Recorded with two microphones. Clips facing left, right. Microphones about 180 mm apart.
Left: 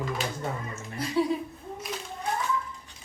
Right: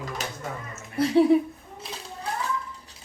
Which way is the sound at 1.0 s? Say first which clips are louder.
Right 8 dB; 65° right (ahead or behind).